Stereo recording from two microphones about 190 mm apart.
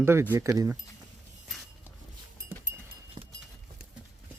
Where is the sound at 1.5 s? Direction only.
Centre (ahead or behind).